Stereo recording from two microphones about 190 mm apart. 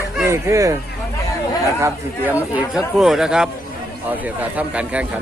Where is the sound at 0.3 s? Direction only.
15° right (ahead or behind).